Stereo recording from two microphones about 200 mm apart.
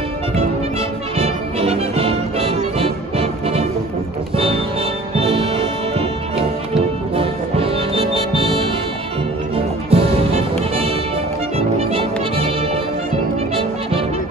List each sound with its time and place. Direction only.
1.1 s music: 30° right (ahead or behind)
5.1 s music: 30° right (ahead or behind)
9.8 s music: 30° right (ahead or behind)
11.5 s music: 30° right (ahead or behind)